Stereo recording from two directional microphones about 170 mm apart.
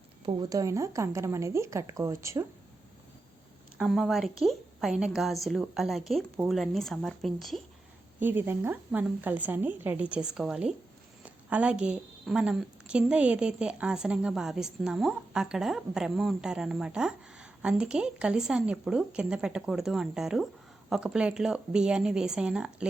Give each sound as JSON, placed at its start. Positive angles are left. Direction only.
{"t": 0.3, "sound": "a woman's voice", "side_deg": -25}
{"t": 3.8, "sound": "a woman's voice", "side_deg": 0}
{"t": 8.2, "sound": "a woman's voice", "side_deg": -10}